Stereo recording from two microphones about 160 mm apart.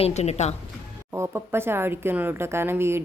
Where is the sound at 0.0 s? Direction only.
45° left (ahead or behind).